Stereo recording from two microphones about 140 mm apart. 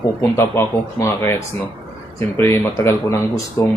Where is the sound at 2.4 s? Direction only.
20° left (ahead or behind).